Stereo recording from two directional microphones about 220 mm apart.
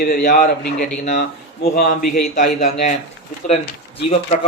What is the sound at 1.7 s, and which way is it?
A man's voice, 35° left (ahead or behind).